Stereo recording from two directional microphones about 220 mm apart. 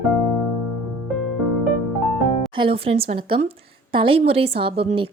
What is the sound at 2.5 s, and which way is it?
A woman's voice, 25° right (ahead or behind).